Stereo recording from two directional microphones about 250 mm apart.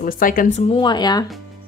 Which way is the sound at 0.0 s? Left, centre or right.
Left.